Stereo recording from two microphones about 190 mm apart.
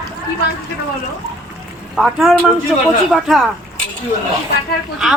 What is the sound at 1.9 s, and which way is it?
A woman's voice, centre (ahead or behind).